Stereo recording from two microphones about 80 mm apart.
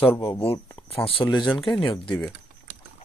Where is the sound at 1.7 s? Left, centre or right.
Left.